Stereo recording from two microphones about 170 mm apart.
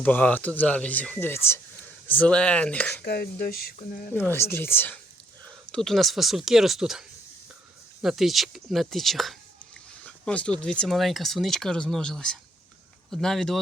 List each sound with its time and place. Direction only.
0.0 s speech: 10° left (ahead or behind)
3.0 s speech: 65° left (ahead or behind)
4.1 s speech: 10° left (ahead or behind)
8.0 s speech: centre (ahead or behind)
10.0 s a sound: 5° left (ahead or behind)
10.6 s speech: 5° left (ahead or behind)